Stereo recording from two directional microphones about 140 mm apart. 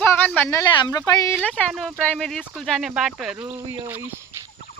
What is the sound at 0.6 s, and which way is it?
Speech, 25° left (ahead or behind).